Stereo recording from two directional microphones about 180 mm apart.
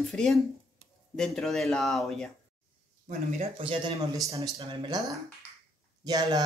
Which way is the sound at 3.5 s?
30° right (ahead or behind).